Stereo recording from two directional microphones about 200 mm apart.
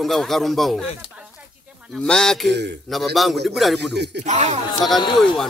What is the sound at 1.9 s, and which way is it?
Speech, 5° left (ahead or behind).